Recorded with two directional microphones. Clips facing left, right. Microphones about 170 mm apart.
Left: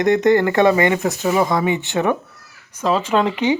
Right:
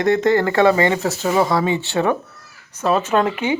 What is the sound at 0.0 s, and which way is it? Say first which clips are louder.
Speech: left 2 dB; 20° left (ahead or behind).